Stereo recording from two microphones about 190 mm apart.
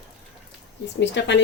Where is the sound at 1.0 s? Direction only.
70° left (ahead or behind).